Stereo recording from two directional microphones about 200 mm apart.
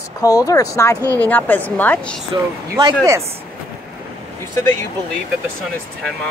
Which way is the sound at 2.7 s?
15° right (ahead or behind).